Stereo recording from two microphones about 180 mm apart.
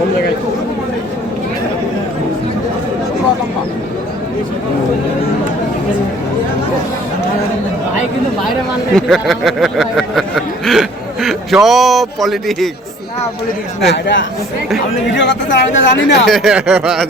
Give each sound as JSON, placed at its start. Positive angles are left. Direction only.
{"t": 9.0, "sound": "a sound", "side_deg": 0}
{"t": 13.9, "sound": "speech", "side_deg": 90}
{"t": 16.2, "sound": "speech", "side_deg": 0}